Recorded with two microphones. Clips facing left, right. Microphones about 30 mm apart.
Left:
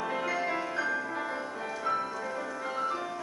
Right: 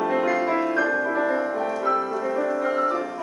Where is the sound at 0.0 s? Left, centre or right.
Centre.